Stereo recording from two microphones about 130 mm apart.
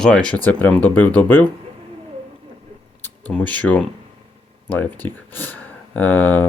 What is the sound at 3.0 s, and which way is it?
Speech, 10° left (ahead or behind).